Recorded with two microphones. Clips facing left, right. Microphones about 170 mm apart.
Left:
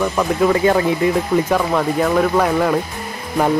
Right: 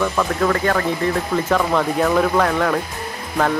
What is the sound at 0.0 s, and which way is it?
Speech, 15° left (ahead or behind).